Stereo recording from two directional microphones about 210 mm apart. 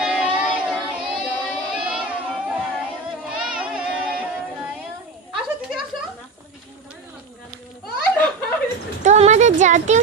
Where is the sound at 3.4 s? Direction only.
5° right (ahead or behind).